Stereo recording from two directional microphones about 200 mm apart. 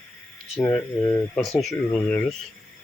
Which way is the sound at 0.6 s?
5° left (ahead or behind).